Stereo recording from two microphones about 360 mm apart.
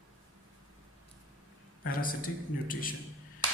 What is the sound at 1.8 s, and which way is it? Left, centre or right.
A man's voice, left.